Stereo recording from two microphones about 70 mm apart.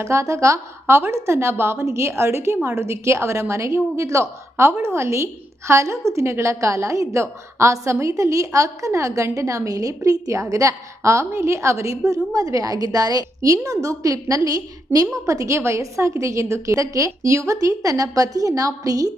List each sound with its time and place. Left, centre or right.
0.0 s a woman's voice: right